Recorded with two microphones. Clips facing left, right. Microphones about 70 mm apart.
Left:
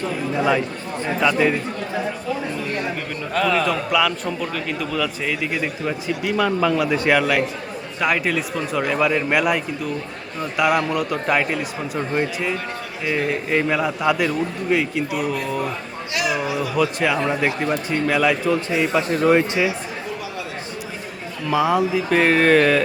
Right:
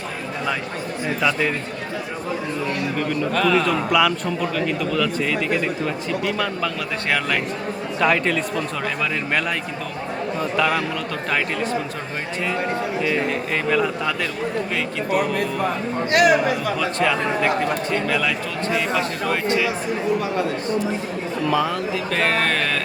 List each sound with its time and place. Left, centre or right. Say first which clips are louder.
1.0 s a man's voice: left 3 dB; centre
3.3 s a man's voice: left 1 dB; centre
10.6 s speech: left 5 dB; centre
16.1 s speech: right 6 dB; right
16.7 s speech: left 1 dB; centre
21.5 s speech: left 6 dB; centre